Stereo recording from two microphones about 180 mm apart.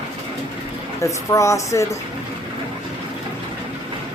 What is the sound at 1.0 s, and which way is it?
Speech, 15° left (ahead or behind).